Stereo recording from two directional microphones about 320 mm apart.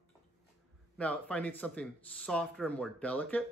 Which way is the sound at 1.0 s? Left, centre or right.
Centre.